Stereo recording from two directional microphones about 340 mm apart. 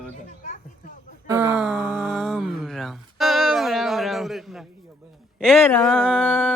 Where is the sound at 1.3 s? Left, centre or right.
Centre.